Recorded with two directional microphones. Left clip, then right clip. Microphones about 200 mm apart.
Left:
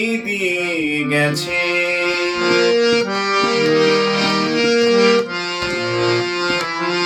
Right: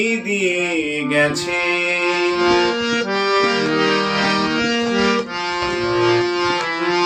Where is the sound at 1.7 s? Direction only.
20° left (ahead or behind).